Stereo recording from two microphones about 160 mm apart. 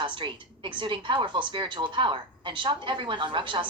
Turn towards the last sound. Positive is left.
turn(degrees=-30)  # may be behind; listen again after turning